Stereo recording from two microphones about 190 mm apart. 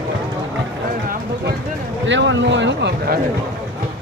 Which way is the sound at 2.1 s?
75° right (ahead or behind).